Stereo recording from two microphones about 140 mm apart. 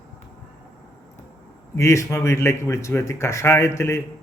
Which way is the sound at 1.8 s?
20° left (ahead or behind).